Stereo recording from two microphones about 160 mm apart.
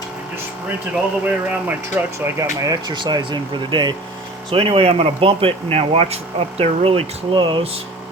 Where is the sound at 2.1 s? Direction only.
20° right (ahead or behind).